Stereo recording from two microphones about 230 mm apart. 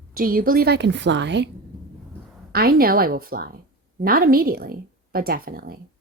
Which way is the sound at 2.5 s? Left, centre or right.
Right.